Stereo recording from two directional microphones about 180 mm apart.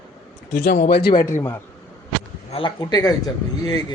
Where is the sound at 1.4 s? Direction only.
15° left (ahead or behind).